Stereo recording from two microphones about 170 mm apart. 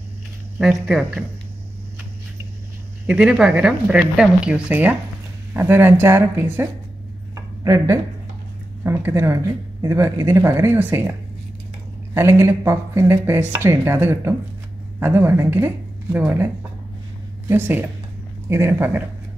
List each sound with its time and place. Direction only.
0.6 s speech: centre (ahead or behind)
3.1 s speech: 5° right (ahead or behind)